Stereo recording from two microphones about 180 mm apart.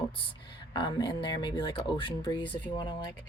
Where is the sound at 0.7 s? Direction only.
25° left (ahead or behind).